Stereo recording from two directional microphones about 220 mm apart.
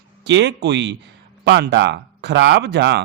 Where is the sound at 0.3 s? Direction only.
50° right (ahead or behind).